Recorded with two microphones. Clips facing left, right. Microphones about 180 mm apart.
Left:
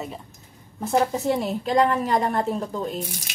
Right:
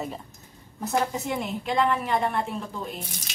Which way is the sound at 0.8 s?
35° left (ahead or behind).